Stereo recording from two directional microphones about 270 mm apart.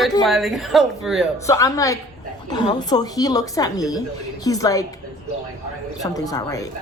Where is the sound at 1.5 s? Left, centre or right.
Centre.